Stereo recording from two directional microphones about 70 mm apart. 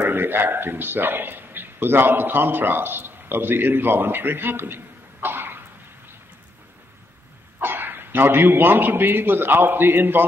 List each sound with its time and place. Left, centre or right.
0.0 s a man's voice: right
7.6 s a man's voice: right